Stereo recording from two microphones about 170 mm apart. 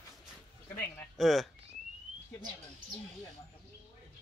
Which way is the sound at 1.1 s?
Centre (ahead or behind).